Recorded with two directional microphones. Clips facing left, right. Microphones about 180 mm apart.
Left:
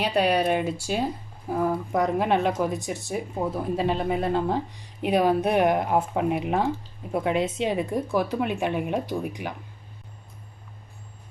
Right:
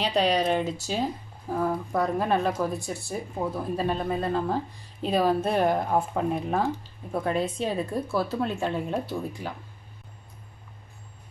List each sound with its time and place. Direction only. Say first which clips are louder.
0.0 s speech: left 1 dB; 10° left (ahead or behind)